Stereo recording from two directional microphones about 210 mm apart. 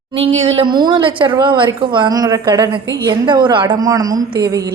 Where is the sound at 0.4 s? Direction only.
25° right (ahead or behind).